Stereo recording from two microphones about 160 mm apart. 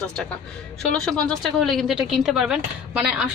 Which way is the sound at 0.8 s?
5° left (ahead or behind).